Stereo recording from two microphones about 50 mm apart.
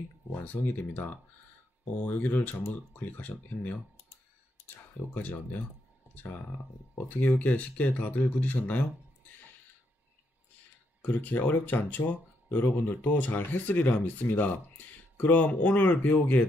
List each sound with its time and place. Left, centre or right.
0.3 s speech: left
2.6 s speech: left
5.1 s speech: left
7.1 s speech: left
11.0 s speech: left